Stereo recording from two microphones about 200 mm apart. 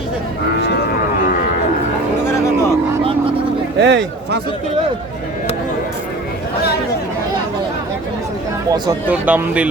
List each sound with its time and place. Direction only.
2.2 s music: 10° left (ahead or behind)
3.8 s speech: 60° right (ahead or behind)
8.7 s speech: 10° right (ahead or behind)